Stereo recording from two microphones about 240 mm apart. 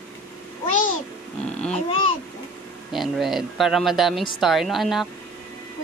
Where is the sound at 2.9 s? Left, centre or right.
Centre.